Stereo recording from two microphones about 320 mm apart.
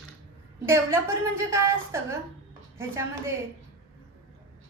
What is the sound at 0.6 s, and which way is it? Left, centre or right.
A woman's voice, centre.